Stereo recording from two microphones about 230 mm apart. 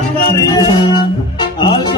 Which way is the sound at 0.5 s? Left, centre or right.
Centre.